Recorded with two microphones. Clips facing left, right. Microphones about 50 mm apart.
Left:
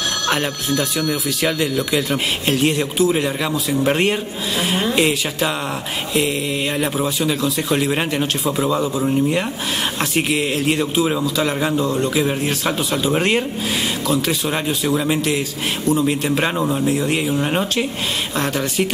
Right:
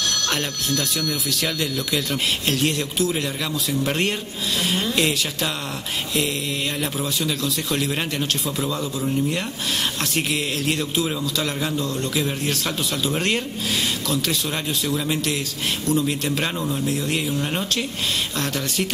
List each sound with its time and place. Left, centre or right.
0.3 s a man's voice: centre
6.8 s a man's voice: centre